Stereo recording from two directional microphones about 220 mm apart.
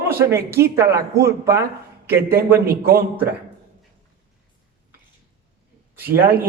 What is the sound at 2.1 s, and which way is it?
Speech, 45° right (ahead or behind).